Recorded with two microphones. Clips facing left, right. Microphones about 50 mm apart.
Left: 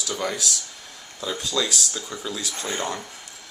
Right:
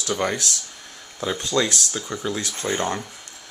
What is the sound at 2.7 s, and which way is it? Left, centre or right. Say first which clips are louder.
Speech: right 3 dB; right.